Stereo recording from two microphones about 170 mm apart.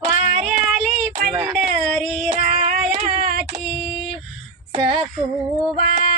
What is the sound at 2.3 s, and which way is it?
Female singing, 45° right (ahead or behind).